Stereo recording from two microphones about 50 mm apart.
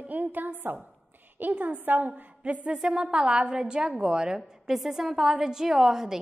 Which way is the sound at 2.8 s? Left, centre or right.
Centre.